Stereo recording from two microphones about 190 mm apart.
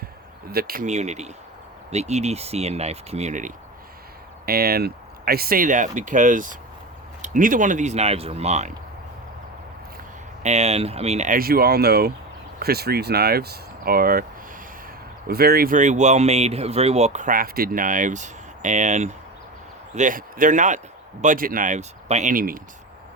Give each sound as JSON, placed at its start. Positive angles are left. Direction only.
{"t": 0.5, "sound": "speech", "side_deg": -50}
{"t": 0.9, "sound": "speech", "side_deg": -35}
{"t": 4.4, "sound": "speech", "side_deg": -55}
{"t": 10.4, "sound": "speech", "side_deg": -35}
{"t": 15.3, "sound": "speech", "side_deg": -55}